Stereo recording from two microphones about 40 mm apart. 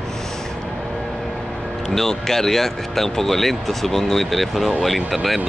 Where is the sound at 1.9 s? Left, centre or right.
Centre.